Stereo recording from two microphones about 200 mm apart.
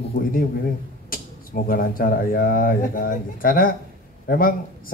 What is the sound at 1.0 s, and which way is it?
Speech, 45° left (ahead or behind).